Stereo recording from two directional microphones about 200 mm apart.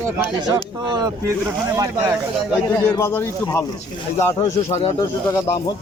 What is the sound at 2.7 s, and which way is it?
Speech, 15° left (ahead or behind).